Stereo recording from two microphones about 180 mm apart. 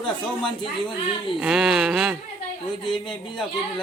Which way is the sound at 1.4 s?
5° right (ahead or behind).